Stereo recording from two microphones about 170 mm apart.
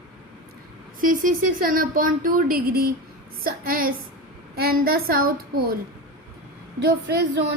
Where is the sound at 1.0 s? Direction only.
55° right (ahead or behind).